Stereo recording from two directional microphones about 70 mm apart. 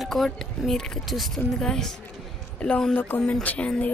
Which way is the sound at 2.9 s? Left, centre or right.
Left.